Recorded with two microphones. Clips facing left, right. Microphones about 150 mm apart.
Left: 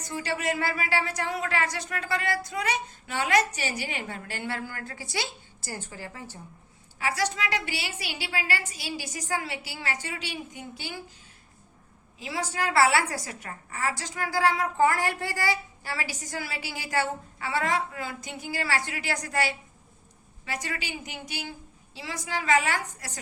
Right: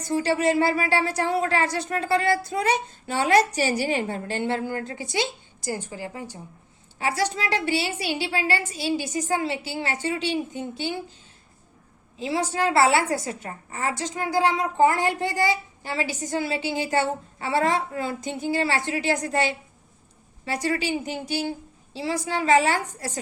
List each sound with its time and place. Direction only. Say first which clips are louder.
0.1 s speech: right 8 dB; 30° right (ahead or behind); by 6.4 s 15° right (ahead or behind)
7.0 s a woman's voice: right 3 dB; 30° right (ahead or behind)
12.2 s a woman's voice: right 6 dB; 30° right (ahead or behind)